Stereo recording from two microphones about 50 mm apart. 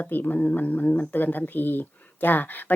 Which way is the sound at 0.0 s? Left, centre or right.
Left.